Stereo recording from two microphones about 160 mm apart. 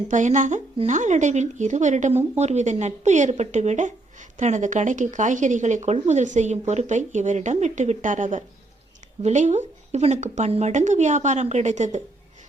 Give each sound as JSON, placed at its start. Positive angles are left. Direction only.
{"t": 0.1, "sound": "speech", "side_deg": -50}